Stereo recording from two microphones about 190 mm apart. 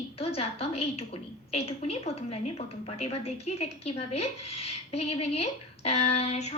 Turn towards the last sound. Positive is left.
turn(degrees=35)  # may be behind; listen again after turning